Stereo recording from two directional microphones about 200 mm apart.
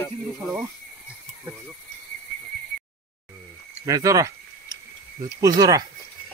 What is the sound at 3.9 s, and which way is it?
Speech, 15° right (ahead or behind).